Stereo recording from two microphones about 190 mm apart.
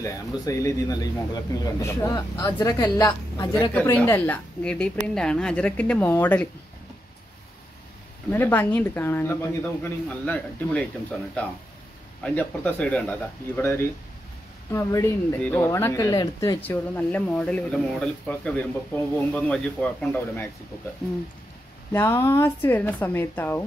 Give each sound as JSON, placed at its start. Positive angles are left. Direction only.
{"t": 0.0, "sound": "speech", "side_deg": 15}
{"t": 3.7, "sound": "a woman's voice", "side_deg": 10}
{"t": 8.3, "sound": "a woman's voice", "side_deg": 10}
{"t": 12.2, "sound": "a woman's voice", "side_deg": 10}
{"t": 16.7, "sound": "a woman's voice", "side_deg": 5}
{"t": 21.9, "sound": "a woman's voice", "side_deg": 10}